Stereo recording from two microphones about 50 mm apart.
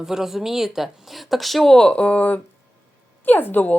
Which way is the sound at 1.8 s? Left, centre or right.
Left.